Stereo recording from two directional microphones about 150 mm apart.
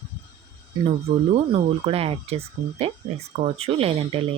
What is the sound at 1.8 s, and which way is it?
Speech, 40° right (ahead or behind).